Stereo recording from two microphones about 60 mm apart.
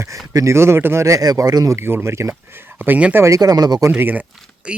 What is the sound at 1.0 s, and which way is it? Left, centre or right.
Speech, right.